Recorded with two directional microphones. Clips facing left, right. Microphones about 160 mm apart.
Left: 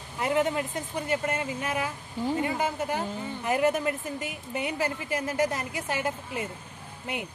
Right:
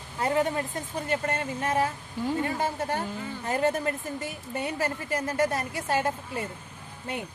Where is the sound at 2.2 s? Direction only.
20° left (ahead or behind).